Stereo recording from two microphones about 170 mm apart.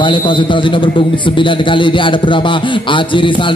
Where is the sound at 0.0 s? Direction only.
30° left (ahead or behind).